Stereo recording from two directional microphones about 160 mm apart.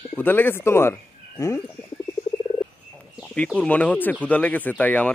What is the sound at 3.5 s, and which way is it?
Speech, 10° left (ahead or behind).